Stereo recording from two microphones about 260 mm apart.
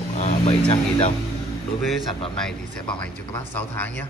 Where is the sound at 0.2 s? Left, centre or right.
Left.